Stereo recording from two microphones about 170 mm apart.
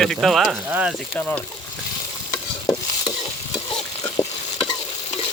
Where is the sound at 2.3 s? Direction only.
25° left (ahead or behind).